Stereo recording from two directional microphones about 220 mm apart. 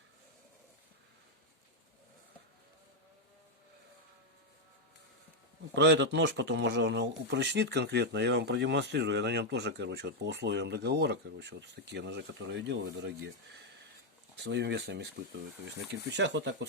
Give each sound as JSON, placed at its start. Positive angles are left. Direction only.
{"t": 5.7, "sound": "speech", "side_deg": -55}